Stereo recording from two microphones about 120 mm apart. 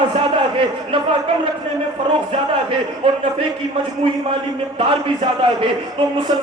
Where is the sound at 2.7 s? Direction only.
50° right (ahead or behind).